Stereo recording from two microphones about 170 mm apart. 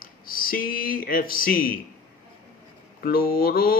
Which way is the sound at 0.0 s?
60° left (ahead or behind).